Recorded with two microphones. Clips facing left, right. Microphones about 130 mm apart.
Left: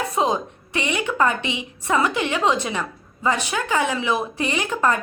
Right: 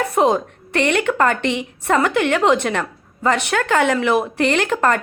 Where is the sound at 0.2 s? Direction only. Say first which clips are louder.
Right 6 dB; 60° right (ahead or behind).